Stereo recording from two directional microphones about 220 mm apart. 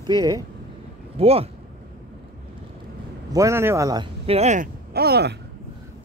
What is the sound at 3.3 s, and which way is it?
Speech, 15° right (ahead or behind).